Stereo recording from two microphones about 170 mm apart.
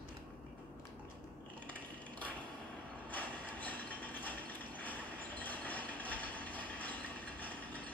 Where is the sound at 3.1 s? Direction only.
10° left (ahead or behind).